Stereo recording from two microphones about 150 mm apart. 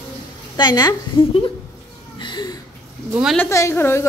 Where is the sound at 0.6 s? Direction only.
25° left (ahead or behind).